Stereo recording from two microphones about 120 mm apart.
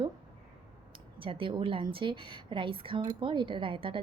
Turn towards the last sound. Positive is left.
turn(degrees=-45)  # may be behind; listen again after turning